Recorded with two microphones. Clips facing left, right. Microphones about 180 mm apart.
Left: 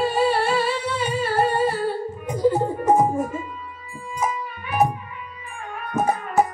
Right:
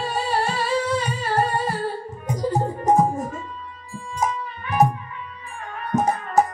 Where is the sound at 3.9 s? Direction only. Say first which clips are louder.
Right 1 dB; 10° left (ahead or behind).